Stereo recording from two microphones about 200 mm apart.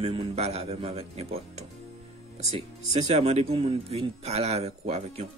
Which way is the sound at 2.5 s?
30° right (ahead or behind).